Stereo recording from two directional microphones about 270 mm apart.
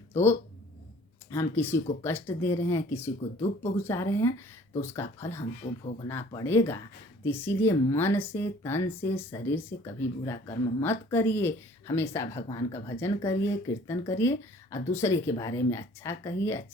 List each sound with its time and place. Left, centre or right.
0.1 s speech: centre